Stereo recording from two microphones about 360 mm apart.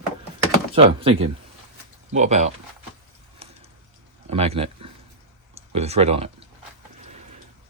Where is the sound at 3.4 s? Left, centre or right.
Centre.